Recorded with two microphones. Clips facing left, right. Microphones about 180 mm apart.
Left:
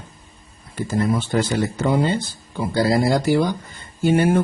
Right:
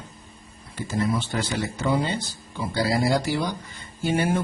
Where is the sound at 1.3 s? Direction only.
45° left (ahead or behind).